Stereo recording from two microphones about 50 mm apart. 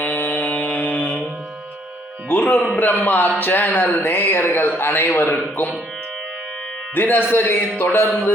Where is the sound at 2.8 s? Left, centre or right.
Left.